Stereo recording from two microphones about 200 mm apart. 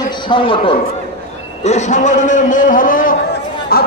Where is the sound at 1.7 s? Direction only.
35° left (ahead or behind).